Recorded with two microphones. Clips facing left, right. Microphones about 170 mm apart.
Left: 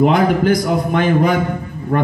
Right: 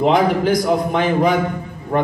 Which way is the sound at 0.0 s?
50° left (ahead or behind).